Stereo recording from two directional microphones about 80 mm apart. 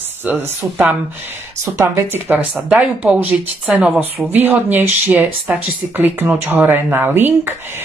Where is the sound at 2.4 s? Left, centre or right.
Centre.